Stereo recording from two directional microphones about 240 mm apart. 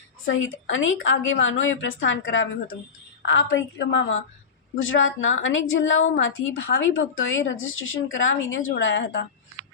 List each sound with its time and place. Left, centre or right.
0.3 s a woman's voice: left